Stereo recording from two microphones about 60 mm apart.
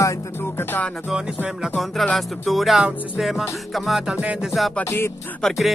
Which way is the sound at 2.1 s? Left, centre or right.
Centre.